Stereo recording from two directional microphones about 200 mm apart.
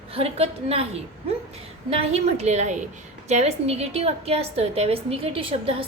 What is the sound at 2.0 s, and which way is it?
A woman's voice, 30° right (ahead or behind).